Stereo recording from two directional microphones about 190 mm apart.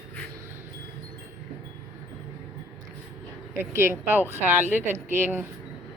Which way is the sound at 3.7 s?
15° right (ahead or behind).